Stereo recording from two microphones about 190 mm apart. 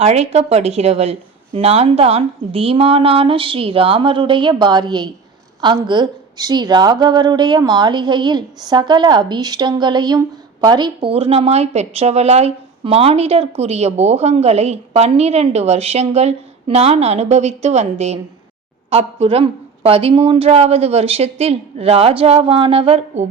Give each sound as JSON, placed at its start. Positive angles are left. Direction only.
{"t": 0.0, "sound": "a woman's voice", "side_deg": -35}